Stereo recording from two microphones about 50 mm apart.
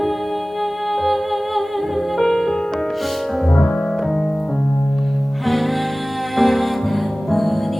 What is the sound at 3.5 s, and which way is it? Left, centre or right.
Music, left.